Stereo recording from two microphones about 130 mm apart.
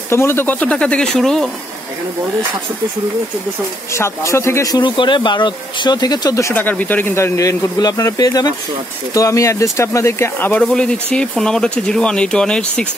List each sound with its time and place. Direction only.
0.1 s speech: 20° left (ahead or behind)
3.9 s speech: 20° left (ahead or behind)
10.6 s speech: 5° left (ahead or behind)